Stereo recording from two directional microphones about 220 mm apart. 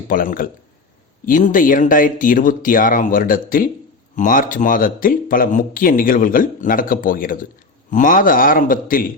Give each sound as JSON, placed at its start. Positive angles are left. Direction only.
{"t": 0.1, "sound": "speech", "side_deg": 40}